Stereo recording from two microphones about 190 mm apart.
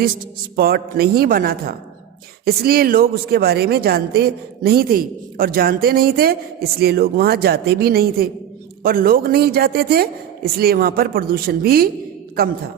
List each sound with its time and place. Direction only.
0.5 s a woman's voice: 55° right (ahead or behind)